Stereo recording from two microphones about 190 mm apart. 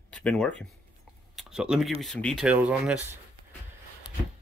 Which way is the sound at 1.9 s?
Centre (ahead or behind).